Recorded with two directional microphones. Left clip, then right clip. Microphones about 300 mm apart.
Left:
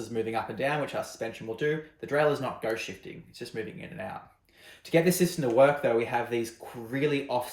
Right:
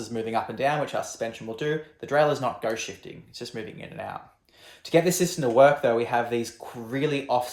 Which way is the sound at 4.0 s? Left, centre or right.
Centre.